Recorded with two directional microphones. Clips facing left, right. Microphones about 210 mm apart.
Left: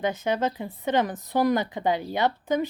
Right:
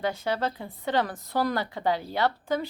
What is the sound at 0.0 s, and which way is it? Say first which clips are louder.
Speech: left 3 dB; 20° left (ahead or behind).